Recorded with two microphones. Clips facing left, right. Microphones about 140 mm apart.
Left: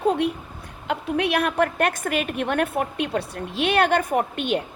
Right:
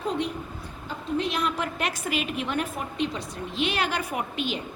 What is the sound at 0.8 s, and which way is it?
A woman's voice, 70° left (ahead or behind).